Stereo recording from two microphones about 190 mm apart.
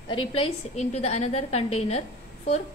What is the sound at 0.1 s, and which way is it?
A woman's voice, 30° left (ahead or behind).